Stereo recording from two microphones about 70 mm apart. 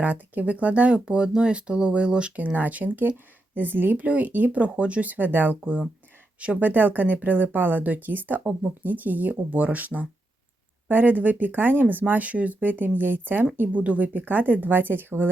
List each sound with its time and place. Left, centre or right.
0.0 s speech: right